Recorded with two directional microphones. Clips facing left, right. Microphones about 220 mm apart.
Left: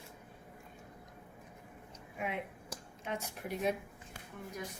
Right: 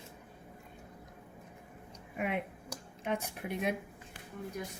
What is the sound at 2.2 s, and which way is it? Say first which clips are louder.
A woman's voice: right 4 dB; 60° right (ahead or behind).